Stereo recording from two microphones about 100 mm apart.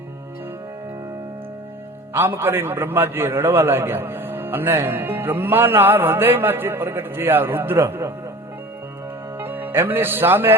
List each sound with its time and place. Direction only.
2.1 s a man's voice: 20° right (ahead or behind)
9.4 s speech: 20° right (ahead or behind)